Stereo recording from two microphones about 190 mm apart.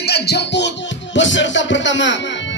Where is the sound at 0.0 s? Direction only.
60° left (ahead or behind).